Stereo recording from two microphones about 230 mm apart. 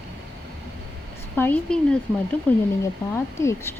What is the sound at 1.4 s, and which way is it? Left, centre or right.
A woman's voice, centre.